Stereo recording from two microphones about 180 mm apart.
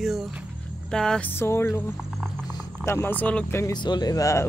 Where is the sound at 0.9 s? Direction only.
5° left (ahead or behind).